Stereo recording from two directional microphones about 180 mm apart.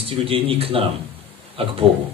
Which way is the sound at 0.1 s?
30° right (ahead or behind).